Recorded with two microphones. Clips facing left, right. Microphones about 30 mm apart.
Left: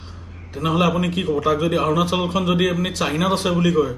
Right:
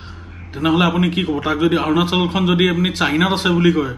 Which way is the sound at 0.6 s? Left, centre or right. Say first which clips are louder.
Right 3 dB; right.